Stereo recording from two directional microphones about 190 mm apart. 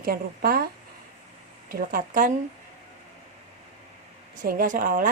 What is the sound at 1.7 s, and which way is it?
Speech, 50° right (ahead or behind).